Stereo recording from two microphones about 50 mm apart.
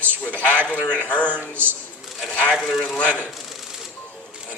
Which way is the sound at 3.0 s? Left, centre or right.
Left.